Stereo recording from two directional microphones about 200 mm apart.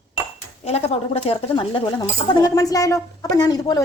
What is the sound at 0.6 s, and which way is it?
Speech, 30° left (ahead or behind).